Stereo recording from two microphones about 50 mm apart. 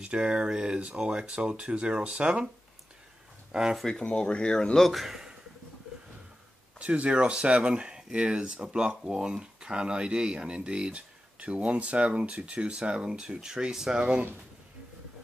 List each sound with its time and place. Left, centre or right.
0.0 s speech: right
3.5 s speech: centre
4.1 s speech: centre
4.8 s speech: centre
6.8 s speech: right